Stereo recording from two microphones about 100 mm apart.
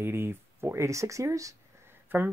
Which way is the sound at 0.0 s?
25° right (ahead or behind).